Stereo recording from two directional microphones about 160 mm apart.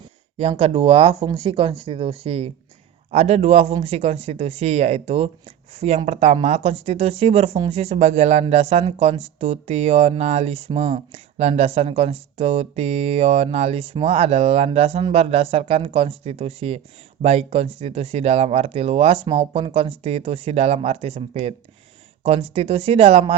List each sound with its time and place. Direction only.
0.3 s speech: 40° right (ahead or behind)